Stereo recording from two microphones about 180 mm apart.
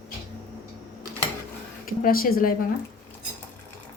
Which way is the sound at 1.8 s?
55° left (ahead or behind).